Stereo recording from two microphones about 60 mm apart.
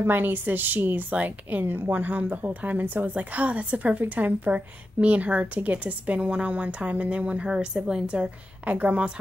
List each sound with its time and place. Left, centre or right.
0.0 s a woman's voice: right